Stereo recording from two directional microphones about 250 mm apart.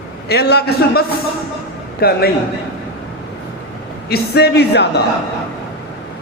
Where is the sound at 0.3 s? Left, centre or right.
Left.